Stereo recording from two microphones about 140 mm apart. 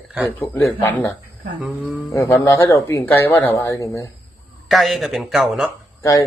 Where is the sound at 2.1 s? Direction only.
20° left (ahead or behind).